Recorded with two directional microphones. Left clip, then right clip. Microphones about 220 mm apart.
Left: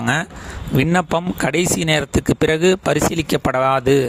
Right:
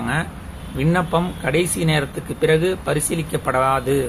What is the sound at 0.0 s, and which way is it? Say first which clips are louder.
Speech: left 4 dB; 50° left (ahead or behind).